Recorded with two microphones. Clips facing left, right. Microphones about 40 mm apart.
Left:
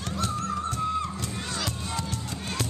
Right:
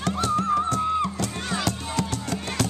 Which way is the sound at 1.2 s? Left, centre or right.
Right.